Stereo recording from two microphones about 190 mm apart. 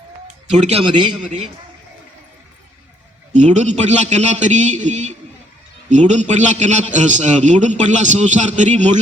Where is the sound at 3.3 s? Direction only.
40° right (ahead or behind).